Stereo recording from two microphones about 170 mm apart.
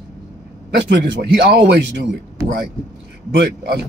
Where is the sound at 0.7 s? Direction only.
70° right (ahead or behind).